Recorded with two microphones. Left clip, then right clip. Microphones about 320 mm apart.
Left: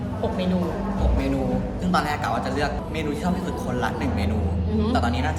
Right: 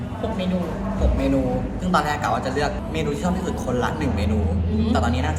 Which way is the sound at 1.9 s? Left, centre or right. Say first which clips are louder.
Right 3 dB; centre.